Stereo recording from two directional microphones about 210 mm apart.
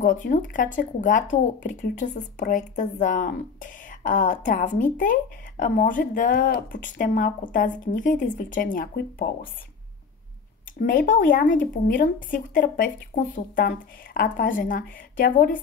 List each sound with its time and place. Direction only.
0.0 s speech: 40° left (ahead or behind)
10.8 s speech: 40° left (ahead or behind)